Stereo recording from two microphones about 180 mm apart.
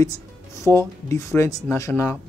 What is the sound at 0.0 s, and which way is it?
Speech, 15° left (ahead or behind).